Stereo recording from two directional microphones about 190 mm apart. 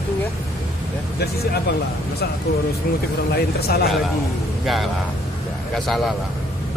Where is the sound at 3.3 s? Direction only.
55° left (ahead or behind).